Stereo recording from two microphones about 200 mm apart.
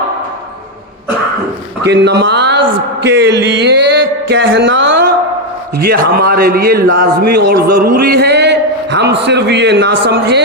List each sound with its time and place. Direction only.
1.8 s speech: 60° right (ahead or behind)
3.0 s music: 60° right (ahead or behind)
5.8 s a man's voice: 50° right (ahead or behind)